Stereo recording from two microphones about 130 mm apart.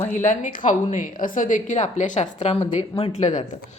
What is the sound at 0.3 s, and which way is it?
A woman's voice, 80° left.